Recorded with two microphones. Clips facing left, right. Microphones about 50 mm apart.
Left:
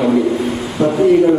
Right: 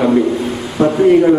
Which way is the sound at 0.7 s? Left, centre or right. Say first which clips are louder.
Right 2 dB; right.